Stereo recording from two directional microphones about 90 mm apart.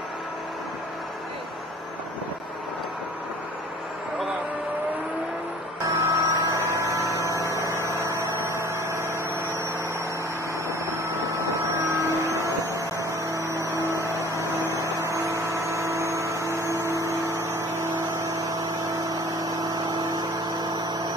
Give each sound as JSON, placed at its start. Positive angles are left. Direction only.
{"t": 5.9, "sound": "mains hum", "side_deg": -35}
{"t": 10.9, "sound": "a sound", "side_deg": -35}
{"t": 13.3, "sound": "vehicle", "side_deg": -35}